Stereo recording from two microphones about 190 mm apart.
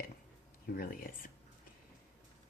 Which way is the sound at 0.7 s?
50° left (ahead or behind).